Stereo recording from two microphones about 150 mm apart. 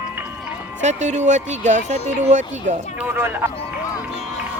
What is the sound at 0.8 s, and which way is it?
Speech, 50° right (ahead or behind).